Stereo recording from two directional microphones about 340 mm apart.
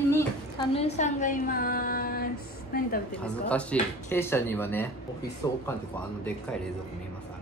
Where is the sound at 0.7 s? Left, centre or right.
Centre.